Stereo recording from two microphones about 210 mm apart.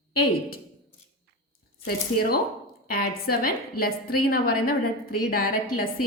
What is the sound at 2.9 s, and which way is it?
A woman's voice, 45° left (ahead or behind).